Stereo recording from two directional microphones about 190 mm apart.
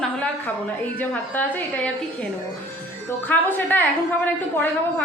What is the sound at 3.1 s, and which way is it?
A woman's voice, 10° left (ahead or behind).